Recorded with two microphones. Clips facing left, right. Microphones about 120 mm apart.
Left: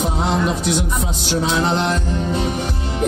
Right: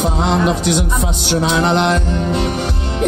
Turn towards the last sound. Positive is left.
turn(degrees=-75)  # may be behind; listen again after turning